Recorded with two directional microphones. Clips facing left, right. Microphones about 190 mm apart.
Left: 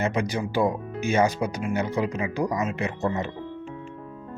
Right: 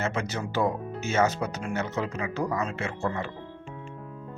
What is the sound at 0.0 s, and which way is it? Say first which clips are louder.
Speech: left 4 dB; 15° left (ahead or behind).